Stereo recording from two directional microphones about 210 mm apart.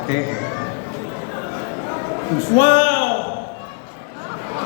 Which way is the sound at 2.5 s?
40° left (ahead or behind).